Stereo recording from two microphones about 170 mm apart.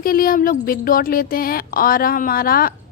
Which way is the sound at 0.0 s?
60° left (ahead or behind).